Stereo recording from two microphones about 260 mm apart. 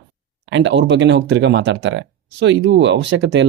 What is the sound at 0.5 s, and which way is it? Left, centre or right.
Speech, right.